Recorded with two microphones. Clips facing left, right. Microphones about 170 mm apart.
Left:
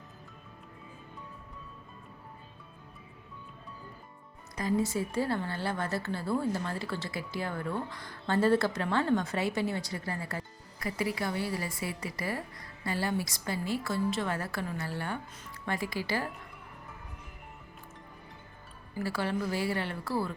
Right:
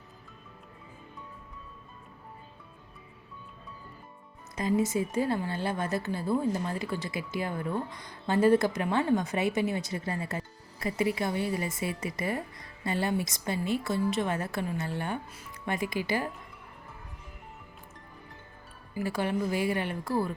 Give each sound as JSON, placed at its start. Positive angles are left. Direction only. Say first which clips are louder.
{"t": 4.5, "sound": "a woman's voice", "louder": "right 2 dB", "side_deg": -20}
{"t": 18.9, "sound": "a woman's voice", "louder": "right 2 dB", "side_deg": -15}